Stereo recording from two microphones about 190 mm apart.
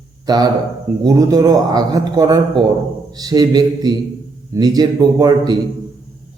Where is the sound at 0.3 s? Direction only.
20° right (ahead or behind).